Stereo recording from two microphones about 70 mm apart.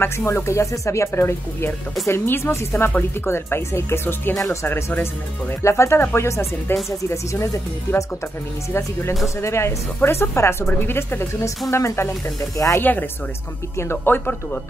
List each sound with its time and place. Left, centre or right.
0.0 s speech: left
9.4 s speech: left
13.7 s speech: left